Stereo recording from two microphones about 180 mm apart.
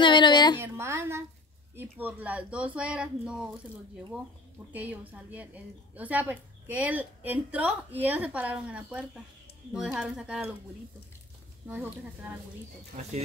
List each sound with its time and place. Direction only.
0.0 s a woman's voice: 25° left (ahead or behind)
0.6 s a woman's voice: 15° right (ahead or behind)
4.7 s a woman's voice: 10° right (ahead or behind)
11.6 s speech: 10° right (ahead or behind)
12.9 s speech: 45° right (ahead or behind)